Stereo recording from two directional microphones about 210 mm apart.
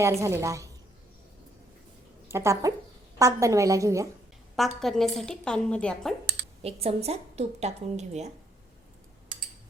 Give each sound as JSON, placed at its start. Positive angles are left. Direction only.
{"t": 0.0, "sound": "a woman's voice", "side_deg": -15}
{"t": 2.2, "sound": "a woman's voice", "side_deg": -10}
{"t": 4.8, "sound": "a woman's voice", "side_deg": 0}
{"t": 6.6, "sound": "a woman's voice", "side_deg": -30}